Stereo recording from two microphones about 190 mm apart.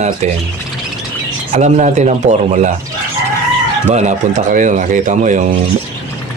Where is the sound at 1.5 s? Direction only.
35° right (ahead or behind).